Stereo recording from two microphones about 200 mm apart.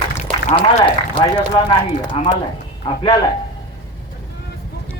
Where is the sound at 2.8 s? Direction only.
25° left (ahead or behind).